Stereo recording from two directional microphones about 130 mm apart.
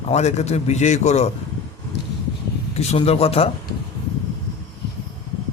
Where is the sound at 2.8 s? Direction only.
55° left (ahead or behind).